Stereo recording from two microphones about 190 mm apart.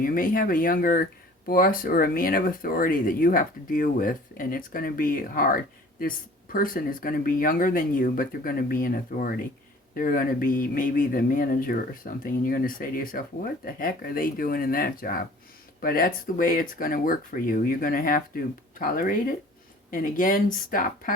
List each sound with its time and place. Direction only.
0.0 s speech: 50° left (ahead or behind)